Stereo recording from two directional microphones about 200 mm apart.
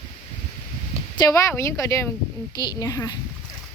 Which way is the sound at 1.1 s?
15° left (ahead or behind).